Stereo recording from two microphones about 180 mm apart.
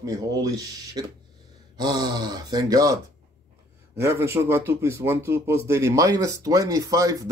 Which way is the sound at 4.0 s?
15° right (ahead or behind).